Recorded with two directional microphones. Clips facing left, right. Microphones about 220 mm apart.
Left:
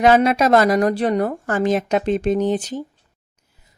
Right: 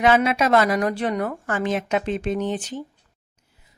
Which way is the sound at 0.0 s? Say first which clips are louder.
Left 4 dB; 40° left (ahead or behind).